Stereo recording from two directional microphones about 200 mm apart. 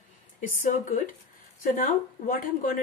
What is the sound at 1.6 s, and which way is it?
Speech, 45° left (ahead or behind).